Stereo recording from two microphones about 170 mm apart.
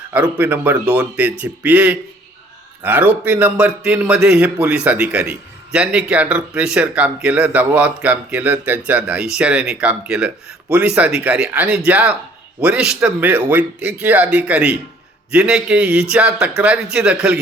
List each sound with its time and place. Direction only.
0.1 s a man's voice: 10° right (ahead or behind)